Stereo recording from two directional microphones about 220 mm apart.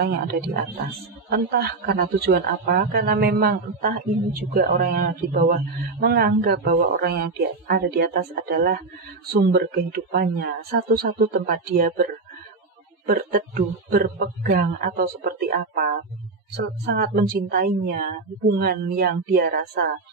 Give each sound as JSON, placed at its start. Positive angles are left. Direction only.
{"t": 1.3, "sound": "a man's voice", "side_deg": -45}